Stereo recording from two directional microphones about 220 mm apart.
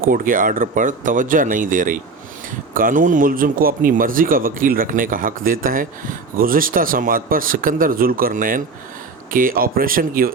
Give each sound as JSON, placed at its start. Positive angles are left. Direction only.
{"t": 0.0, "sound": "speech", "side_deg": -40}